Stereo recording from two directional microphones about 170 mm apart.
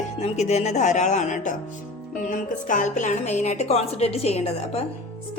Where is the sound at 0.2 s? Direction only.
40° left (ahead or behind).